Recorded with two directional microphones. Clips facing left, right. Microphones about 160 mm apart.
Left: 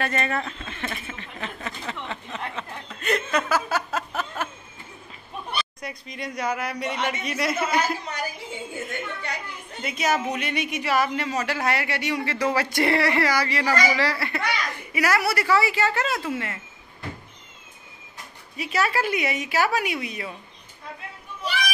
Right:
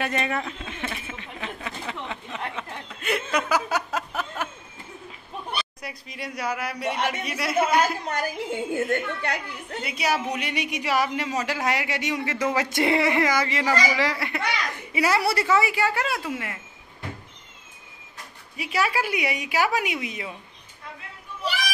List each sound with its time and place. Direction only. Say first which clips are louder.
0.0 s a sound: even; 15° right (ahead or behind)
2.5 s chuckle: even; 10° right (ahead or behind)
5.8 s speech: left 2 dB; 5° right (ahead or behind)
7.5 s a woman's voice: right 7 dB; 50° right (ahead or behind)
9.8 s a man's voice: left 2 dB; 5° right (ahead or behind)
15.0 s a man's voice: right 1 dB; 25° right (ahead or behind); by 16.5 s 10° right (ahead or behind)
18.6 s a man's voice: left 1 dB; 10° right (ahead or behind)